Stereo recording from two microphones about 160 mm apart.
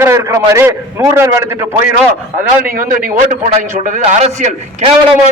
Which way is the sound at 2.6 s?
60° right (ahead or behind).